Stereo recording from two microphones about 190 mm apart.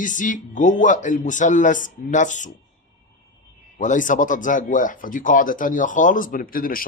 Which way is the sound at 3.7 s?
40° left (ahead or behind).